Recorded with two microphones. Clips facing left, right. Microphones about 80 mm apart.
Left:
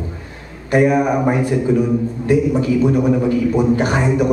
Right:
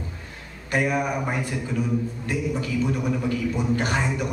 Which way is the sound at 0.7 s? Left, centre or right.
Left.